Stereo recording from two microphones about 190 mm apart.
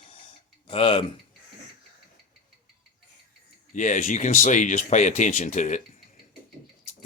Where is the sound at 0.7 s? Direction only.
30° left (ahead or behind).